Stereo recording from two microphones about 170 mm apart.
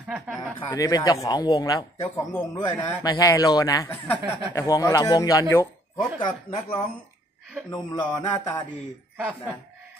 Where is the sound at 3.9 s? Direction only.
10° left (ahead or behind); by 6.6 s 25° left (ahead or behind).